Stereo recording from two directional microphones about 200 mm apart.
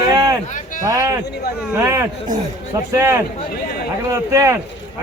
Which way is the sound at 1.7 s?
15° right (ahead or behind).